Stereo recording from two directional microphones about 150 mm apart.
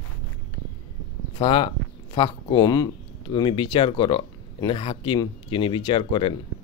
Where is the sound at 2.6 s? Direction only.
25° left (ahead or behind).